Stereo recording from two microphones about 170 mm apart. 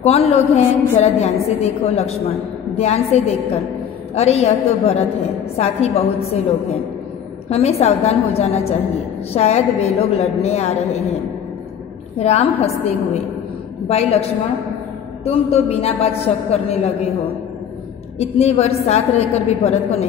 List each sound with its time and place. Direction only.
0.0 s a woman's voice: 35° left (ahead or behind)
7.4 s a woman's voice: 40° left (ahead or behind)
12.2 s a woman's voice: 40° left (ahead or behind)
15.2 s a woman's voice: 35° left (ahead or behind)
18.2 s a woman's voice: 40° left (ahead or behind)